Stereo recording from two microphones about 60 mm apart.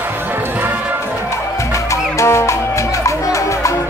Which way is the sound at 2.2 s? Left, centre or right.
Left.